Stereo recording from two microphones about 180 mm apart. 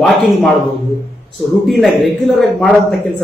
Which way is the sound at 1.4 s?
Centre (ahead or behind).